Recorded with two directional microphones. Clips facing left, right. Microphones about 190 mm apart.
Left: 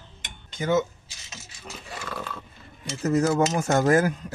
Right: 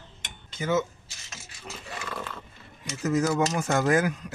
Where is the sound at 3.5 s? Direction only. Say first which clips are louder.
Left 3 dB; 40° left (ahead or behind).